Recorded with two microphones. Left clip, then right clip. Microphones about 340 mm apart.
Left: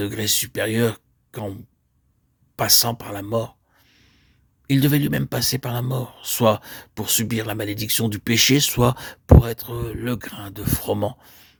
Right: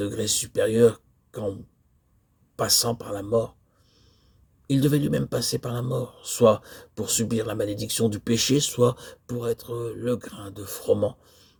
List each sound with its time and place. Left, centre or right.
0.0 s speech: left
4.6 s speech: left